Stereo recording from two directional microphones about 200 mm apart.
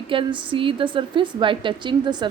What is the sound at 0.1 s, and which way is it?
A woman's voice, 25° right (ahead or behind).